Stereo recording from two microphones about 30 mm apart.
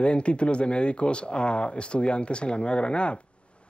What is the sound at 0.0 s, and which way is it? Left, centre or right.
Speech, left.